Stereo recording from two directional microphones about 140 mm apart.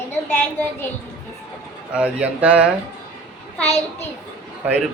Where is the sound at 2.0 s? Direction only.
10° right (ahead or behind).